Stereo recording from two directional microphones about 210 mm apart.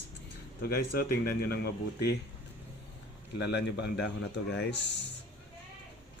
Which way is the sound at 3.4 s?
55° left (ahead or behind).